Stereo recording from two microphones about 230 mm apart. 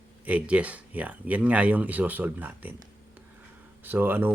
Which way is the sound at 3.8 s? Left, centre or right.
Centre.